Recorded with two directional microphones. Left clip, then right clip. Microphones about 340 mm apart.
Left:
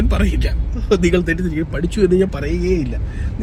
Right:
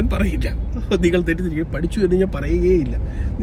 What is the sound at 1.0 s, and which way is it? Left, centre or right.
Speech, left.